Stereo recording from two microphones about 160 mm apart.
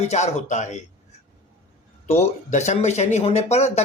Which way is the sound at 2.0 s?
45° left (ahead or behind).